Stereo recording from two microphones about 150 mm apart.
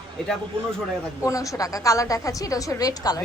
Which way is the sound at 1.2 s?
20° left (ahead or behind).